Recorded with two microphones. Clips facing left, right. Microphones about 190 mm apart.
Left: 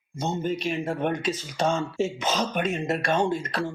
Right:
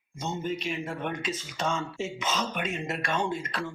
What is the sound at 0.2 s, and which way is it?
Speech, 35° left (ahead or behind).